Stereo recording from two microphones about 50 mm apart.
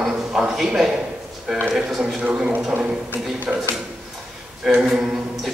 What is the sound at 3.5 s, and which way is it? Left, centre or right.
Speech, right.